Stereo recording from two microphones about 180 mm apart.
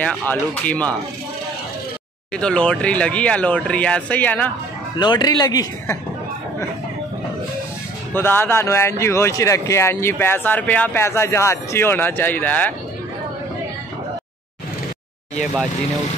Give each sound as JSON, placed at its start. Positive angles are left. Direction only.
{"t": 0.3, "sound": "speech", "side_deg": 5}
{"t": 2.3, "sound": "speech", "side_deg": 5}
{"t": 4.9, "sound": "speech", "side_deg": 25}
{"t": 8.1, "sound": "speech", "side_deg": 10}